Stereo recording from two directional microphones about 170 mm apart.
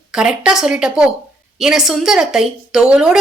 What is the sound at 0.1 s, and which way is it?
A woman's voice, 5° right (ahead or behind).